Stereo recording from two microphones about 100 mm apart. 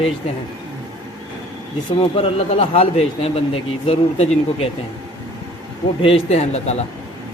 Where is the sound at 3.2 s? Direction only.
90° left.